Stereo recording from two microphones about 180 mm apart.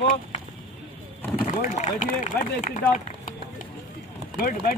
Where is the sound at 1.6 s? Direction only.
45° left (ahead or behind).